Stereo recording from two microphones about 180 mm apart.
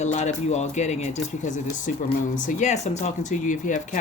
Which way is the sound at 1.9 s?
50° left (ahead or behind).